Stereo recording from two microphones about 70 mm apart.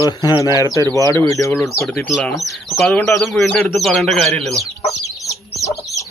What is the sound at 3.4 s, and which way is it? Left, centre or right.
Speech, centre.